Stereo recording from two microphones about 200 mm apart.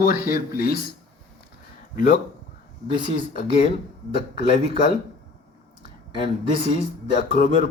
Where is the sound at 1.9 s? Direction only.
45° left (ahead or behind).